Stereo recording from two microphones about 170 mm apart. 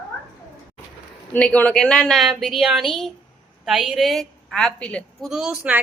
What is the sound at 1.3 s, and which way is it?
A woman's voice, 10° left (ahead or behind).